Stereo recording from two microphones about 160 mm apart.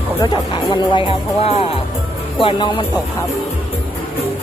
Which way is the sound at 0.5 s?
30° left (ahead or behind).